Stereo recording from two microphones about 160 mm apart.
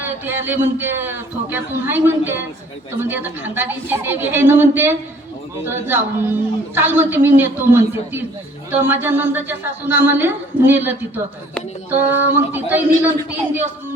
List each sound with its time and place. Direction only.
0.0 s a man's voice: 10° right (ahead or behind)
11.9 s a man's voice: 15° right (ahead or behind)